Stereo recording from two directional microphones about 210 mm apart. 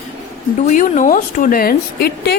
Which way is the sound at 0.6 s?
40° left (ahead or behind).